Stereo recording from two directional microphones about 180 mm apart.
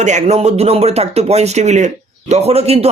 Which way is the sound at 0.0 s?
40° right (ahead or behind).